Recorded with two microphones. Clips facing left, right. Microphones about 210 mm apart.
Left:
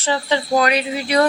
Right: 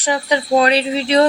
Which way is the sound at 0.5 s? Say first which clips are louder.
Right 4 dB; 30° right (ahead or behind).